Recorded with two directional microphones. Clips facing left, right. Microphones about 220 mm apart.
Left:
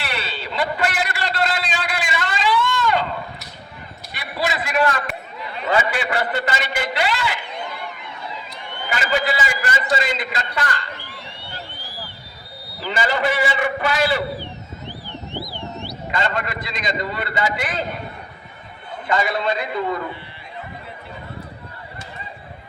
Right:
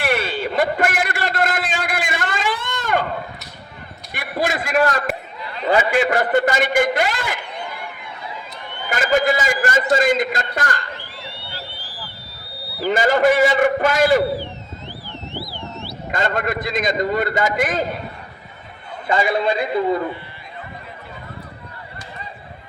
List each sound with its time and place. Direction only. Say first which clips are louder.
0.0 s a sound: right 8 dB; 50° right (ahead or behind)
4.1 s a sound: right 3 dB; 50° right (ahead or behind)
5.6 s a man's voice: right 4 dB; 45° right (ahead or behind)
8.9 s a man's voice: right 5 dB; 45° right (ahead or behind)
12.8 s a man's voice: right 6 dB; 45° right (ahead or behind)
15.3 s car alarm: left 1 dB; 15° left (ahead or behind)
16.1 s a man's voice: right 3 dB; 45° right (ahead or behind)
19.0 s a man's voice: right 3 dB; 30° right (ahead or behind)